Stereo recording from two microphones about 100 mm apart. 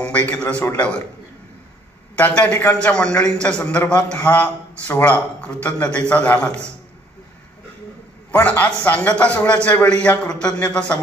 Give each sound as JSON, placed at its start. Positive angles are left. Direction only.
{"t": 0.0, "sound": "a sound", "side_deg": 15}
{"t": 2.1, "sound": "a man's voice", "side_deg": 15}
{"t": 8.3, "sound": "a man's voice", "side_deg": 15}